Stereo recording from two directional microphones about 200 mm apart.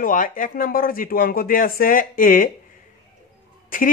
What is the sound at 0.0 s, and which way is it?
Speech, 45° left (ahead or behind).